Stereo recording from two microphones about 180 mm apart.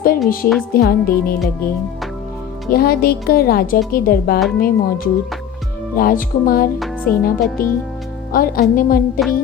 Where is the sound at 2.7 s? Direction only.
55° left (ahead or behind).